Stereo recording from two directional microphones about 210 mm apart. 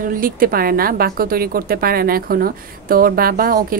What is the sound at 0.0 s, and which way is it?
A woman's voice, 40° right (ahead or behind).